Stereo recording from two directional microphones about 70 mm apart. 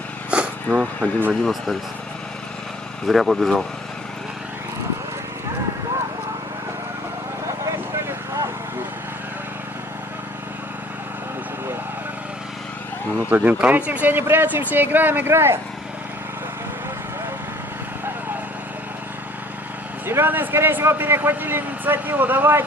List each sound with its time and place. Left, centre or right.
0.3 s a sound: centre
1.3 s speech: centre
3.1 s speech: centre
13.3 s speech: right
20.1 s speech: right